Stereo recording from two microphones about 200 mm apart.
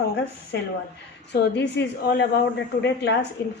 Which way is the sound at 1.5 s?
60° left (ahead or behind).